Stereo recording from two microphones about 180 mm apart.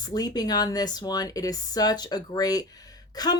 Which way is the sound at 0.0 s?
20° left (ahead or behind).